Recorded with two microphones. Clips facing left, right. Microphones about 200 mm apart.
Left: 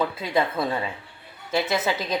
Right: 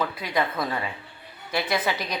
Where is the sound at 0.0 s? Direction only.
25° left (ahead or behind).